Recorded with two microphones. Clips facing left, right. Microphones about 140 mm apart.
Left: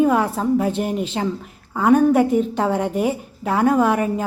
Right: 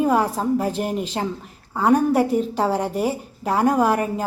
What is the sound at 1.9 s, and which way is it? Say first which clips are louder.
A woman's voice: left 4 dB; 35° right (ahead or behind).